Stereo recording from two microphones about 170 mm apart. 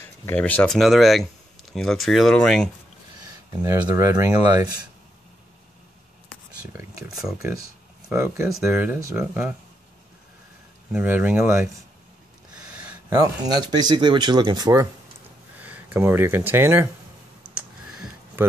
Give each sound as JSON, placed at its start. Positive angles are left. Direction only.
{"t": 0.0, "sound": "speech", "side_deg": 15}
{"t": 3.7, "sound": "speech", "side_deg": -20}
{"t": 6.7, "sound": "speech", "side_deg": -15}
{"t": 7.1, "sound": "speech", "side_deg": -5}
{"t": 7.3, "sound": "speech", "side_deg": -20}
{"t": 8.5, "sound": "speech", "side_deg": -5}
{"t": 10.9, "sound": "speech", "side_deg": -5}
{"t": 13.1, "sound": "speech", "side_deg": -20}
{"t": 15.6, "sound": "speech", "side_deg": -10}